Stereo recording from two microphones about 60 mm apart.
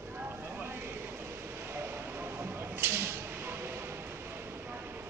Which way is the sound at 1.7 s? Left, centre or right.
Right.